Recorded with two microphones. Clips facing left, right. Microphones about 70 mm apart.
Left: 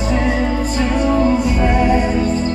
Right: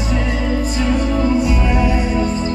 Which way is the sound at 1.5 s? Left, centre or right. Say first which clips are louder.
Left 3 dB; left.